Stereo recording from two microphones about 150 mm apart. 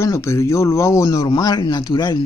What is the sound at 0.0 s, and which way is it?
Speech, 20° left (ahead or behind).